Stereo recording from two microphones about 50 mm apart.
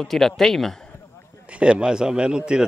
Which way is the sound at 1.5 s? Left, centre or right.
Right.